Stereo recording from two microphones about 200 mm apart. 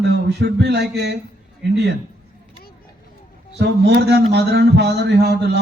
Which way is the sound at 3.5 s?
55° right (ahead or behind).